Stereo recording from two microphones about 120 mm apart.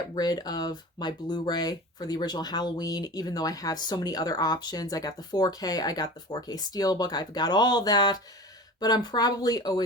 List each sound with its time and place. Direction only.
0.1 s speech: 35° left (ahead or behind)